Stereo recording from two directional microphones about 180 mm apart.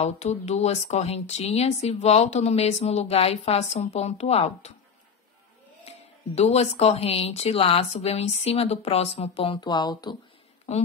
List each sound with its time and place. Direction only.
0.0 s speech: 40° left (ahead or behind)
5.9 s speech: 35° left (ahead or behind)